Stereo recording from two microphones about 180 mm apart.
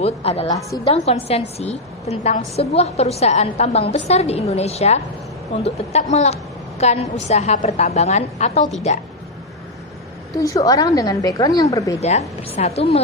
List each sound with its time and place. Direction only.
0.0 s a woman's voice: 35° left (ahead or behind)
10.3 s a woman's voice: 20° left (ahead or behind)
12.0 s a woman's voice: 40° left (ahead or behind)